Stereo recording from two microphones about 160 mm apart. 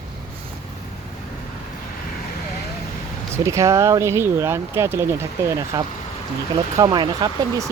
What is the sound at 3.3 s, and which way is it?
Speech, 20° right (ahead or behind).